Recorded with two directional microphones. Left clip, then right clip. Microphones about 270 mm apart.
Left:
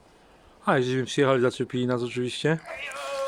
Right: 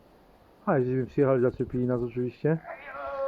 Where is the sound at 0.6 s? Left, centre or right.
Centre.